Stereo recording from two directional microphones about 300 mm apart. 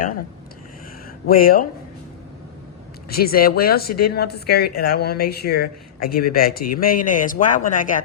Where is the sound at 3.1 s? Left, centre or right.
Left.